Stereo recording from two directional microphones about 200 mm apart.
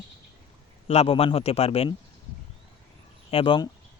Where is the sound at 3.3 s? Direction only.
25° left (ahead or behind).